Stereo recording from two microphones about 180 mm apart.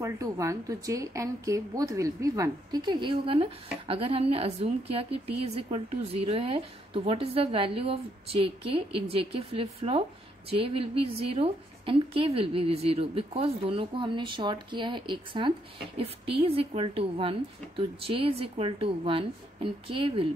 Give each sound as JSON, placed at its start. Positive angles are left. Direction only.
{"t": 0.0, "sound": "a woman's voice", "side_deg": -15}